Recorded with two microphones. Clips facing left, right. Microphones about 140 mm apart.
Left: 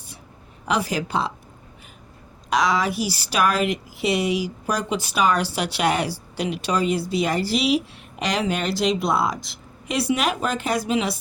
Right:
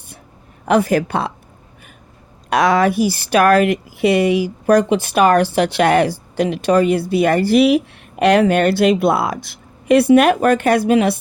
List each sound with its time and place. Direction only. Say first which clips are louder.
0.6 s speech: right 9 dB; 55° right (ahead or behind)
2.5 s speech: right 7 dB; 55° right (ahead or behind)